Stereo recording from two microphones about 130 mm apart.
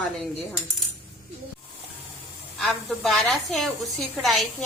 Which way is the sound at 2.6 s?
Centre (ahead or behind).